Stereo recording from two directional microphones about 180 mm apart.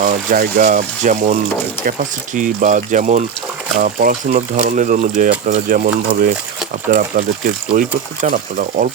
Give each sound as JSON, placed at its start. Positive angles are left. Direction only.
{"t": 0.0, "sound": "speech", "side_deg": -50}
{"t": 7.7, "sound": "speech", "side_deg": -45}